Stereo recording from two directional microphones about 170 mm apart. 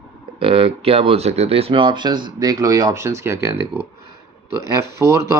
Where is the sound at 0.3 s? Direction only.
35° right (ahead or behind); by 3.8 s 15° right (ahead or behind).